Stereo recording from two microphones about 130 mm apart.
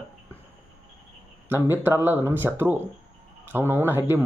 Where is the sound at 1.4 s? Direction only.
15° right (ahead or behind).